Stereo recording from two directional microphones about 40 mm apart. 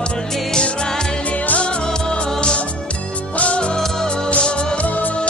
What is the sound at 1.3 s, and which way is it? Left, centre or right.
Music, left.